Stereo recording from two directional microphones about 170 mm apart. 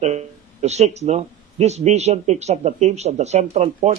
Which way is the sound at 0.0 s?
40° right (ahead or behind).